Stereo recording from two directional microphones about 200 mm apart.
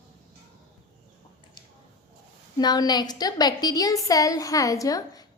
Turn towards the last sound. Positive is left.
turn(degrees=20)  # may be behind; listen again after turning